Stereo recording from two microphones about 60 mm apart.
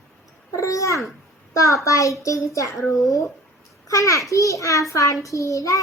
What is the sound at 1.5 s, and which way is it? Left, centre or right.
A woman's voice, left.